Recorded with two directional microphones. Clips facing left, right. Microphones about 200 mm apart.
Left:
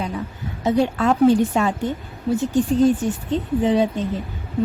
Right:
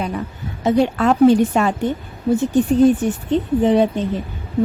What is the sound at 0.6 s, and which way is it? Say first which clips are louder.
A woman's voice: right 3 dB; 70° right (ahead or behind).